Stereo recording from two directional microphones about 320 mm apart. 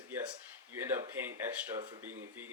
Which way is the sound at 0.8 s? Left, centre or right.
Centre.